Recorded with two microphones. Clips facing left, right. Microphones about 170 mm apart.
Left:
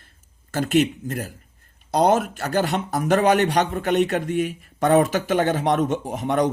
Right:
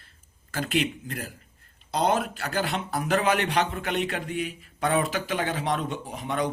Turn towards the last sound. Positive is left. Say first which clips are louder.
# left 7 dB
turn(degrees=45)  # may be behind; listen again after turning